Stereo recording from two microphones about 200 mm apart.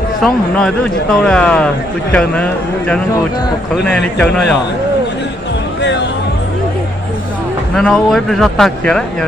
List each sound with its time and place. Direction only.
0.2 s speech: 5° left (ahead or behind)
5.8 s a sound: 60° left (ahead or behind)
7.7 s speech: centre (ahead or behind)